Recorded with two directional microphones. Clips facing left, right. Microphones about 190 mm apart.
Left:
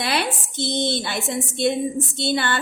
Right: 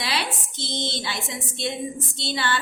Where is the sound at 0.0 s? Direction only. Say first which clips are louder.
Left 5 dB; 55° left (ahead or behind).